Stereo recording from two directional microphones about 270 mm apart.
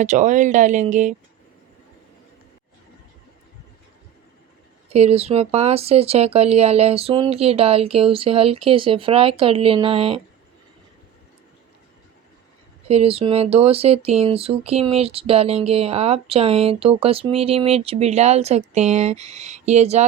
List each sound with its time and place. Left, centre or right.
0.0 s speech: right
4.9 s speech: right
12.9 s speech: right